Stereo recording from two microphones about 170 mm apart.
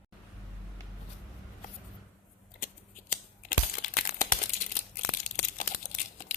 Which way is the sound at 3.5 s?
55° left (ahead or behind).